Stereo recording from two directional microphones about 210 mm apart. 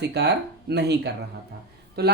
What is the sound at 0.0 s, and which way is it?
Speech, 50° right (ahead or behind).